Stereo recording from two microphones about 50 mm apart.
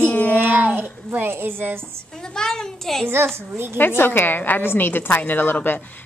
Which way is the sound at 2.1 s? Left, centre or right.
Centre.